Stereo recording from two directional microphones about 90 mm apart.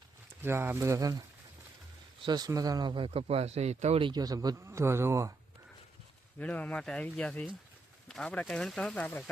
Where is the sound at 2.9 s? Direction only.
70° right (ahead or behind).